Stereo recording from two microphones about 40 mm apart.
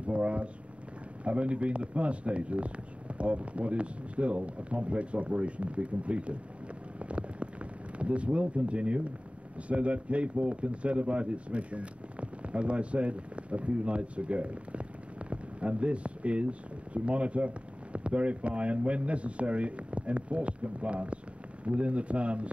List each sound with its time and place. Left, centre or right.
0.0 s speech: right
7.0 s a sound: right
9.7 s speech: right